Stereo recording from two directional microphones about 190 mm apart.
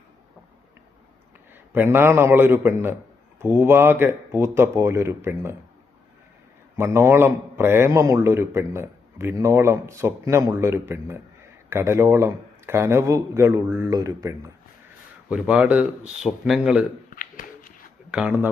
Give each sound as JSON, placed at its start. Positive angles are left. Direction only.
{"t": 1.7, "sound": "a man's voice", "side_deg": -10}
{"t": 6.7, "sound": "a man's voice", "side_deg": -15}
{"t": 15.3, "sound": "speech", "side_deg": -5}
{"t": 17.2, "sound": "a sound", "side_deg": 45}
{"t": 18.1, "sound": "a man's voice", "side_deg": -5}